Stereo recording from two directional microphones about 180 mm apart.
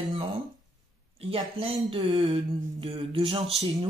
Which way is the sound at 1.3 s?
30° right (ahead or behind).